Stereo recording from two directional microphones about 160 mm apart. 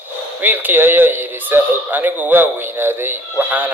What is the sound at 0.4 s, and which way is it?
Speech, 10° right (ahead or behind).